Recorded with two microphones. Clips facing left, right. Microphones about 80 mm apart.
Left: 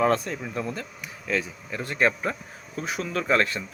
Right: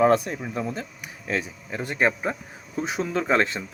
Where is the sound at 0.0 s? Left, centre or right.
Centre.